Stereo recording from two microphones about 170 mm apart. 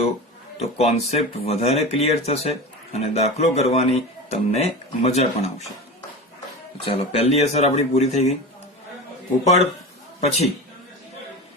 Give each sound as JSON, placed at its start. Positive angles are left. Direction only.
{"t": 0.6, "sound": "speech", "side_deg": 40}
{"t": 6.8, "sound": "speech", "side_deg": 35}
{"t": 10.2, "sound": "speech", "side_deg": 40}